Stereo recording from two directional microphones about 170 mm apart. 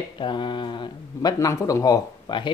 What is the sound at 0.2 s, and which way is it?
Speech, 25° left (ahead or behind).